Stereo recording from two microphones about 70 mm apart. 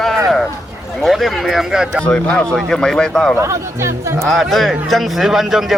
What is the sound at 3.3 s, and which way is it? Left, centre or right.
Speech, right.